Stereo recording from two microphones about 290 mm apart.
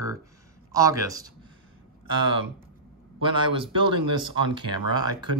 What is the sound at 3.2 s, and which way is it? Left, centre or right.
Speech, centre.